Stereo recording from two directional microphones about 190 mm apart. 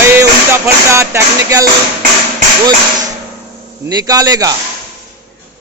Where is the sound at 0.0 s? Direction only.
15° right (ahead or behind).